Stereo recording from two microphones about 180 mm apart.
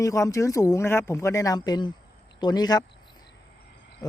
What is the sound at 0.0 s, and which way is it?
Speech, 20° left (ahead or behind).